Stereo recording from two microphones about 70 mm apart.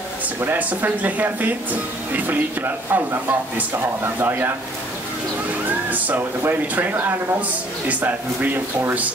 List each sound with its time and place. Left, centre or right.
0.4 s speech: right
5.7 s speech: right